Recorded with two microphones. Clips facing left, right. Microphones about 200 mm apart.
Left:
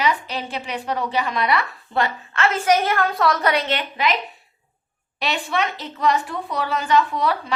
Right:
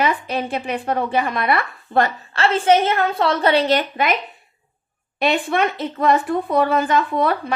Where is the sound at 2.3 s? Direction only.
30° right (ahead or behind); by 4.1 s 50° right (ahead or behind).